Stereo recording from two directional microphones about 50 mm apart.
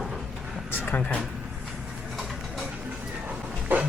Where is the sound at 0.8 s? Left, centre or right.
Left.